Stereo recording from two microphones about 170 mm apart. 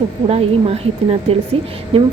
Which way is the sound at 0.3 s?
35° right (ahead or behind).